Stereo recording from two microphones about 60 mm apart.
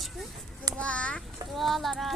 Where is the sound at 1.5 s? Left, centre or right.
Centre.